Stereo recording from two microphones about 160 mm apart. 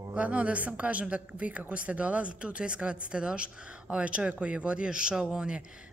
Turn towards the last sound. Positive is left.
turn(degrees=-5)  # may be behind; listen again after turning